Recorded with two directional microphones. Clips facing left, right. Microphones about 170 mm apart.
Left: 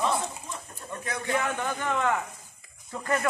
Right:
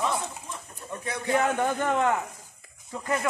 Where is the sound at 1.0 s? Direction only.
40° right (ahead or behind).